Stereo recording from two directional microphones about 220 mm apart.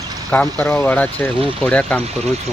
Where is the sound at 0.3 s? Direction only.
5° left (ahead or behind).